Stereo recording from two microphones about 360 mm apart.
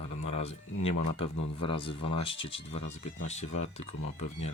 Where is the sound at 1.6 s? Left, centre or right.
Centre.